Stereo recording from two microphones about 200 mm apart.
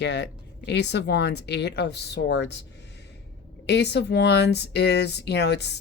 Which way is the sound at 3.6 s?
60° left (ahead or behind).